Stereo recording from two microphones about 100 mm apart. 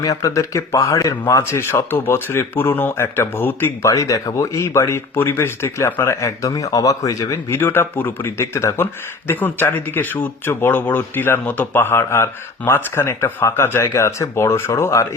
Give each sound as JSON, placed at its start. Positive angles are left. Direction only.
{"t": 0.0, "sound": "speech", "side_deg": 35}
{"t": 3.9, "sound": "speech", "side_deg": 35}